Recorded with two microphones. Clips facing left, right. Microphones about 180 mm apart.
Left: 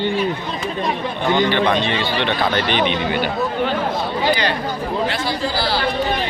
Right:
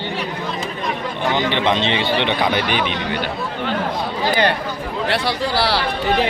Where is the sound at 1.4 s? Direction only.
20° right (ahead or behind).